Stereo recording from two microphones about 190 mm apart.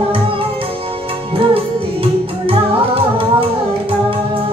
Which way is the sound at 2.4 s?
30° right (ahead or behind).